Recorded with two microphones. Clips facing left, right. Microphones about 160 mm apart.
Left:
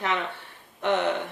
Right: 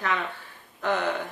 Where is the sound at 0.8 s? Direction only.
25° left (ahead or behind).